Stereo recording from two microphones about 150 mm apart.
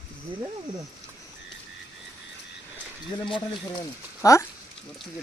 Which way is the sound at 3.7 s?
20° left (ahead or behind).